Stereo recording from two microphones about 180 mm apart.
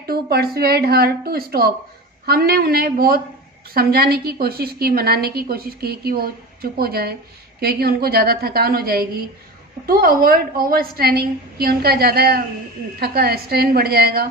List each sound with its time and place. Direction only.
0.1 s a woman's voice: 60° right (ahead or behind)